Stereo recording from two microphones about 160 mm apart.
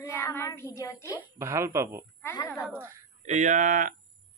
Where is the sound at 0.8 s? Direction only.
20° left (ahead or behind).